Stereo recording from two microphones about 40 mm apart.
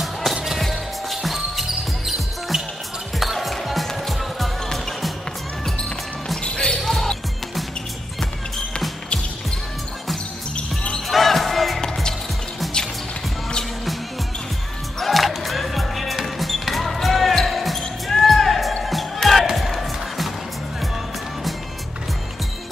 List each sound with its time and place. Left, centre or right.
0.0 s music: centre
0.7 s basketball bounce: centre
3.2 s music: centre
6.4 s basketball bounce: left
6.8 s basketball bounce: centre
11.1 s music: centre
15.0 s music: centre
18.1 s basketball bounce: centre
18.9 s music: centre